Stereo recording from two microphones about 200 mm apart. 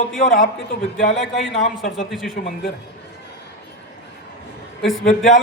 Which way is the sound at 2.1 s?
Centre (ahead or behind).